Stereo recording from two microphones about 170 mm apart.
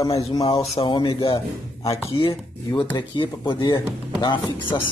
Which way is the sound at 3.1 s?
30° left (ahead or behind).